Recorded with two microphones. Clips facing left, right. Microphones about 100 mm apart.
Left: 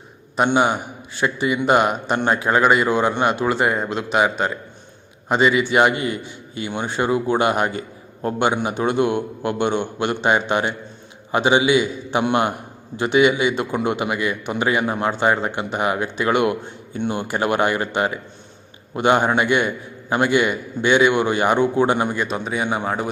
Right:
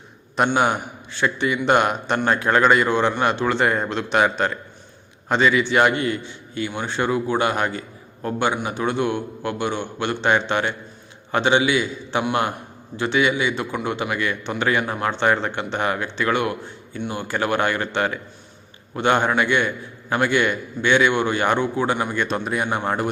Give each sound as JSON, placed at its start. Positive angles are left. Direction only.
{"t": 0.4, "sound": "a man's voice", "side_deg": 5}
{"t": 2.1, "sound": "a man's voice", "side_deg": 20}
{"t": 7.8, "sound": "a sound", "side_deg": 30}
{"t": 8.5, "sound": "a man's voice", "side_deg": 20}
{"t": 22.2, "sound": "speech", "side_deg": 5}